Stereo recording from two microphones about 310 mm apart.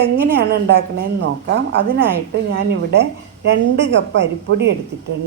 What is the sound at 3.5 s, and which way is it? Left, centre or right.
A woman's voice, right.